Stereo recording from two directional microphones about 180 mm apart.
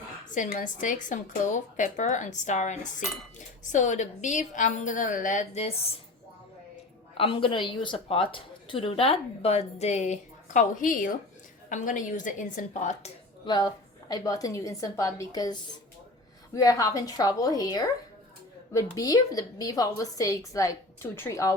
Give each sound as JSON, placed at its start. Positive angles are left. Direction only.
{"t": 0.3, "sound": "a woman's voice", "side_deg": 45}
{"t": 7.2, "sound": "a woman's voice", "side_deg": 30}
{"t": 13.4, "sound": "a woman's voice", "side_deg": 25}